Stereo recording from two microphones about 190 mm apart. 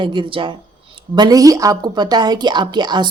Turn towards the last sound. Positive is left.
turn(degrees=-25)  # may be behind; listen again after turning